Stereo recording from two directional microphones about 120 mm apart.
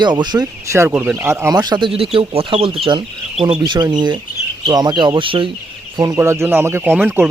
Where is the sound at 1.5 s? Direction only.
35° right (ahead or behind).